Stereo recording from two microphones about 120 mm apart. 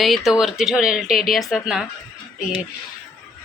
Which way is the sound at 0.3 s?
5° right (ahead or behind).